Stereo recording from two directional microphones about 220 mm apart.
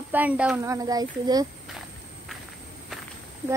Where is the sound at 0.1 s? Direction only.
5° right (ahead or behind).